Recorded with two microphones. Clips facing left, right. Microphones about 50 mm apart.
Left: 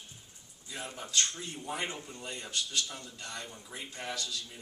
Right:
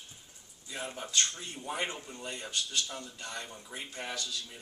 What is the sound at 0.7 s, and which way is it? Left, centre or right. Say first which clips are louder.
A man's voice: right 1 dB; centre.